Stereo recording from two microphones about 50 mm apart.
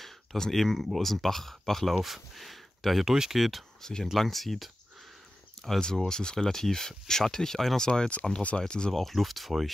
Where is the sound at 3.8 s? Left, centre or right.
Centre.